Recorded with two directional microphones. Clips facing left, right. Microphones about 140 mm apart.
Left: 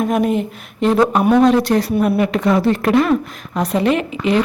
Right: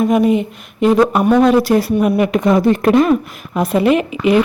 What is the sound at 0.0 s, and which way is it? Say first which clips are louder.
Speech: right 4 dB; centre (ahead or behind).